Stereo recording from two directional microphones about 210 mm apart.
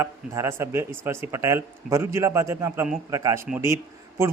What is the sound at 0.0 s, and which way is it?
Speech, 10° right (ahead or behind).